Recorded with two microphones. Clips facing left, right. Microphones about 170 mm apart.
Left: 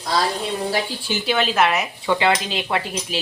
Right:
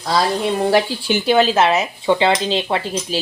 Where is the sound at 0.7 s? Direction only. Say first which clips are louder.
Right 7 dB; 65° right (ahead or behind).